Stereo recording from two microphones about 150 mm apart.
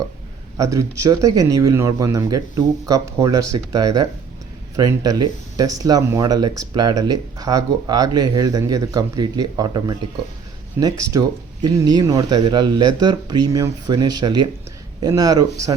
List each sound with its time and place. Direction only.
0.5 s speech: 20° right (ahead or behind)